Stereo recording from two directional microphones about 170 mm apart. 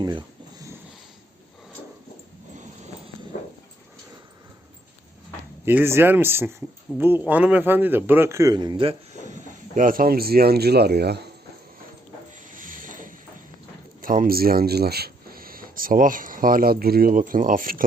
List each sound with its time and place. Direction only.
0.0 s a sound: 25° right (ahead or behind)
3.3 s dog: 50° left (ahead or behind)
5.6 s a man's voice: 15° right (ahead or behind); by 9.0 s 30° right (ahead or behind)
9.2 s speech: 50° right (ahead or behind); by 11.2 s 70° right (ahead or behind)
12.5 s a sound: 50° right (ahead or behind)
14.0 s speech: 55° right (ahead or behind)